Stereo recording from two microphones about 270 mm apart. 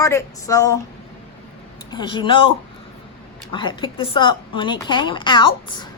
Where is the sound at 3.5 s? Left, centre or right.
Centre.